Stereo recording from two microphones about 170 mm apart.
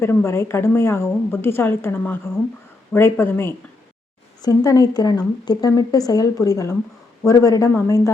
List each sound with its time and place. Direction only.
0.0 s a woman's voice: 15° left (ahead or behind)